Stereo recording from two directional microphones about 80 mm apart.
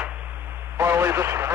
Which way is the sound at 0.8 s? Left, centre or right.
Right.